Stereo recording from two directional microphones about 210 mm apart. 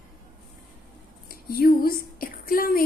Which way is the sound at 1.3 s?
45° left (ahead or behind).